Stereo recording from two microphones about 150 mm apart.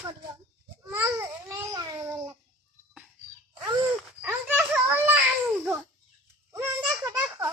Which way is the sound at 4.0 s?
10° right (ahead or behind).